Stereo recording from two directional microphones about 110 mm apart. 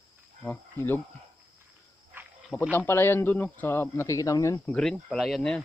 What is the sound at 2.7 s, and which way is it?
Speech, 20° left (ahead or behind).